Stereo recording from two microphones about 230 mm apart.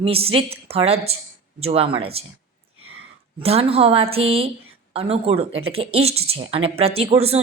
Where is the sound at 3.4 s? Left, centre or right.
Right.